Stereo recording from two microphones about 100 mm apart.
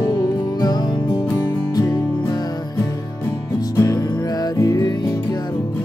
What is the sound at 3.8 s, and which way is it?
Music, 35° left (ahead or behind).